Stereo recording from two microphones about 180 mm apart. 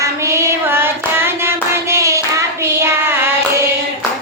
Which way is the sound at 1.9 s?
15° right (ahead or behind).